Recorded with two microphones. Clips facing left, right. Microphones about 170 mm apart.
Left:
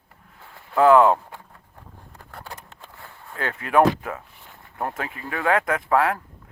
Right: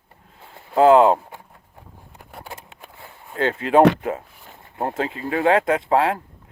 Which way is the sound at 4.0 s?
25° right (ahead or behind).